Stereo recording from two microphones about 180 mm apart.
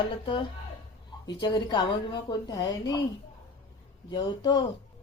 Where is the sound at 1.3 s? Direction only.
25° left (ahead or behind).